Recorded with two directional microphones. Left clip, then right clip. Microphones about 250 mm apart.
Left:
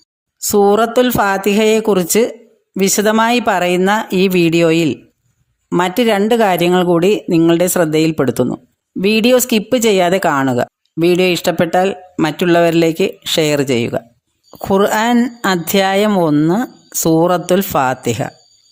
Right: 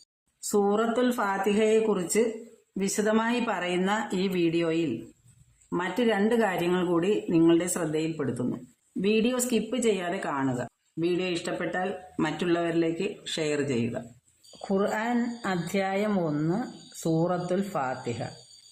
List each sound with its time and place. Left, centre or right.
0.3 s speech: left